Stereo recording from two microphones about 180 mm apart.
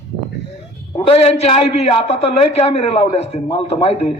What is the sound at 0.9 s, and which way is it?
A man's voice, 35° left (ahead or behind).